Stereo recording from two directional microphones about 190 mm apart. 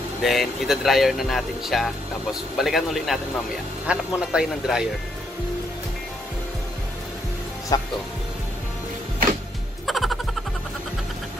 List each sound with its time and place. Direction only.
0.2 s speech: centre (ahead or behind)
7.7 s speech: 20° left (ahead or behind)
9.8 s music: centre (ahead or behind)